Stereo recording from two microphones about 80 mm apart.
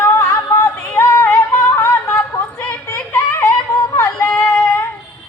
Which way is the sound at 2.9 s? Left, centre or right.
Left.